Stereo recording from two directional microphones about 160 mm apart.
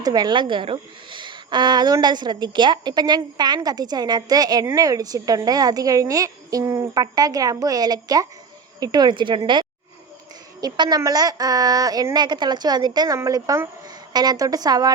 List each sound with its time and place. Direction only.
0.0 s speech: 25° right (ahead or behind)